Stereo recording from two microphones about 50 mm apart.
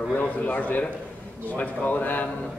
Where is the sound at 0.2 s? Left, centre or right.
Left.